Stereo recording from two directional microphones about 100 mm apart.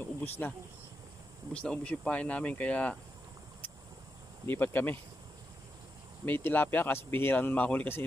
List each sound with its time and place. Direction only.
0.0 s a sound: 20° left (ahead or behind)
1.5 s speech: 10° left (ahead or behind)
4.5 s speech: 20° left (ahead or behind)
6.2 s speech: 20° left (ahead or behind)